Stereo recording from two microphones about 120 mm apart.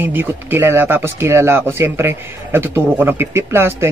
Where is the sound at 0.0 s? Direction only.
15° right (ahead or behind).